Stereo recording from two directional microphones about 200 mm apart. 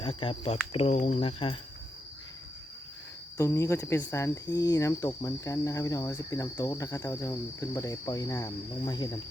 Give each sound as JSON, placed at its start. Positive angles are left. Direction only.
{"t": 0.0, "sound": "speech", "side_deg": 25}
{"t": 3.3, "sound": "speech", "side_deg": 15}